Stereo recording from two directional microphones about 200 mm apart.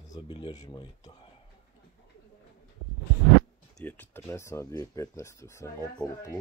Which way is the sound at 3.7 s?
10° left (ahead or behind).